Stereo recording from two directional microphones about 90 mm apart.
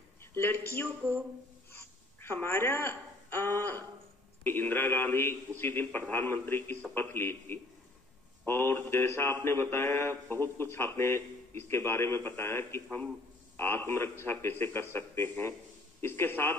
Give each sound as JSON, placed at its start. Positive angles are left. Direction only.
{"t": 0.2, "sound": "a woman's voice", "side_deg": 25}